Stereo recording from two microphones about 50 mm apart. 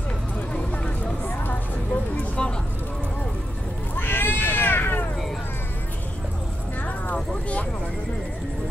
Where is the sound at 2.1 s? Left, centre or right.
Left.